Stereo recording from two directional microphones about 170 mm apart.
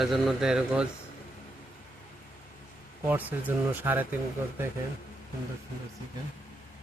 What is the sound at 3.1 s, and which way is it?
Speech, 10° right (ahead or behind).